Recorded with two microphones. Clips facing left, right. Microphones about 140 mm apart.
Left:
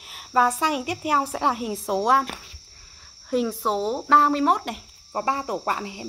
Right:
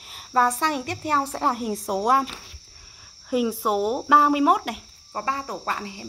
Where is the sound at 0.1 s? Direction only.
5° left (ahead or behind).